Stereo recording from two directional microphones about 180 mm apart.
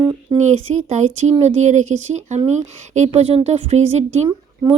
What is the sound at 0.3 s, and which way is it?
Speech, 40° right (ahead or behind).